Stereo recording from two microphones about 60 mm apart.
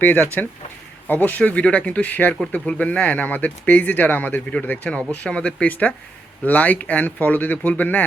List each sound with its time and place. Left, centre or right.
0.0 s speech: left
1.4 s speech: left